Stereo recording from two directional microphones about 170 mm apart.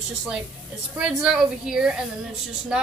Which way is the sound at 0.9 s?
5° right (ahead or behind).